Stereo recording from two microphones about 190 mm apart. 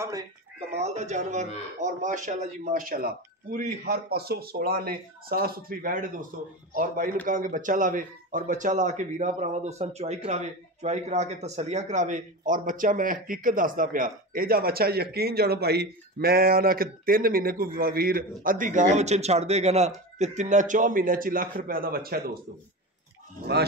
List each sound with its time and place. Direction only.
0.0 s speech: 15° right (ahead or behind)
0.7 s speech: 35° right (ahead or behind); by 22.4 s 55° right (ahead or behind)